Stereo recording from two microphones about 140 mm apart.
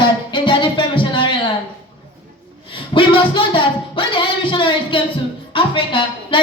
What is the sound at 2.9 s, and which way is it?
Speech, 35° left (ahead or behind).